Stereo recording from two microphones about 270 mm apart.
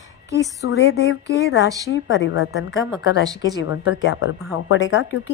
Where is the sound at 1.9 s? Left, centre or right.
Left.